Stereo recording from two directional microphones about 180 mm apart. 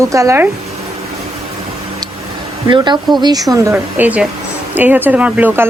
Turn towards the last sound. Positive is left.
turn(degrees=-10)  # may be behind; listen again after turning